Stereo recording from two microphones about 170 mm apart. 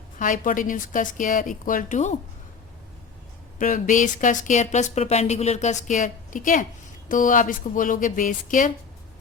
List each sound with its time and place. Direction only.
0.2 s speech: 50° left (ahead or behind)
3.6 s speech: 50° left (ahead or behind)